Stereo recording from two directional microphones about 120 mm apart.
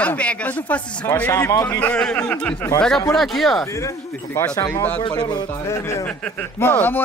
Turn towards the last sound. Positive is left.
turn(degrees=15)  # may be behind; listen again after turning